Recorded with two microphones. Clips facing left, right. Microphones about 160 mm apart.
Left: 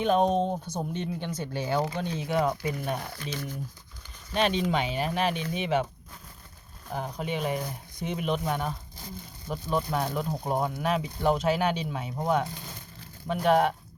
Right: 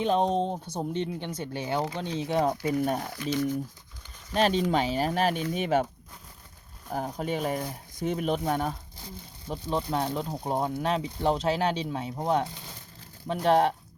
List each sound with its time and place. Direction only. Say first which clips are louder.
0.0 s speech: left 1 dB; 30° right (ahead or behind)
2.6 s speech: right 4 dB; 45° right (ahead or behind)
3.2 s speech: right 8 dB; 20° right (ahead or behind)
4.4 s speech: right 2 dB; 40° right (ahead or behind)
6.9 s speech: right 2 dB; 45° right (ahead or behind)
9.5 s speech: even; 25° right (ahead or behind)